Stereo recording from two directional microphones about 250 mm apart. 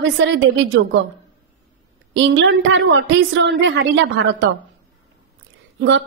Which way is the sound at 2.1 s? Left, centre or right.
Right.